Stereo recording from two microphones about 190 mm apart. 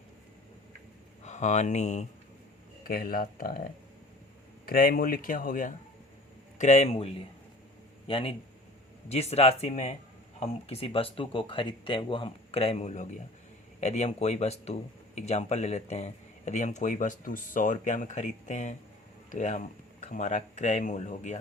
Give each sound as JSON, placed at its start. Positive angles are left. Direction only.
{"t": 1.2, "sound": "speech", "side_deg": 40}
{"t": 2.8, "sound": "speech", "side_deg": 50}